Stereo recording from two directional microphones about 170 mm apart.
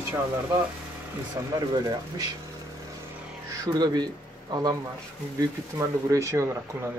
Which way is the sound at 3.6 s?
25° right (ahead or behind).